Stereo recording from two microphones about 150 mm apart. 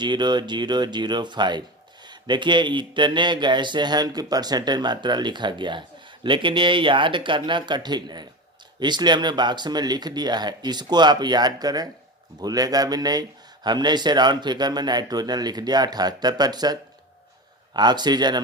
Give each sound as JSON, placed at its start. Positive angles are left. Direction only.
{"t": 0.0, "sound": "speech", "side_deg": -30}
{"t": 17.7, "sound": "speech", "side_deg": -30}